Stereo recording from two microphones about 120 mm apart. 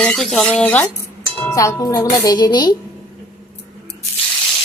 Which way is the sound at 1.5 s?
30° left (ahead or behind).